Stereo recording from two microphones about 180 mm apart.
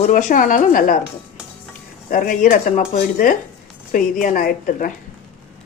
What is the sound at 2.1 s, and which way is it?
A woman's voice, 50° left (ahead or behind).